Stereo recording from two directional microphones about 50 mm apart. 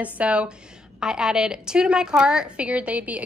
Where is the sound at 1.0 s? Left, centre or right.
Centre.